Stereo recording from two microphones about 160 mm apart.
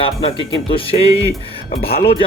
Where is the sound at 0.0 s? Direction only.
35° left (ahead or behind).